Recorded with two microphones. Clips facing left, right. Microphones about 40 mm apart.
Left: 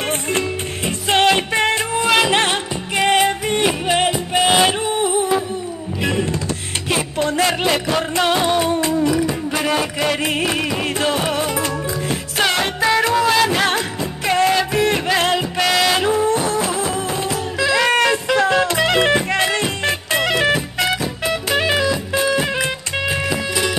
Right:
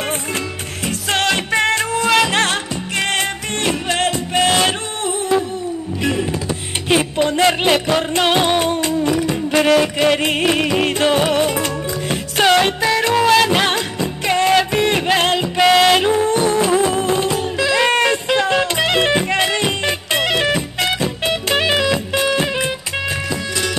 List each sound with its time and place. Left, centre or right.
0.8 s music: left
6.9 s music: right
12.4 s music: right
17.7 s music: centre
18.3 s music: right
18.6 s music: centre
19.6 s music: right
21.0 s music: right
23.3 s music: centre